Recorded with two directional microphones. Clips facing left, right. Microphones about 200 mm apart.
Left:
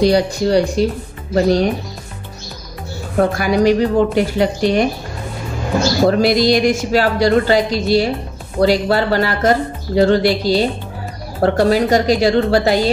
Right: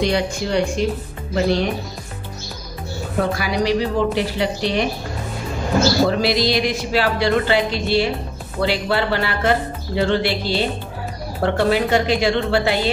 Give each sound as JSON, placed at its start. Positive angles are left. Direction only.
{"t": 0.0, "sound": "speech", "side_deg": 35}
{"t": 3.3, "sound": "a woman's voice", "side_deg": 50}
{"t": 6.0, "sound": "a woman's voice", "side_deg": 45}